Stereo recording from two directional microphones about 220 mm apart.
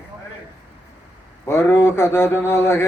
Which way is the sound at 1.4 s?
10° left (ahead or behind).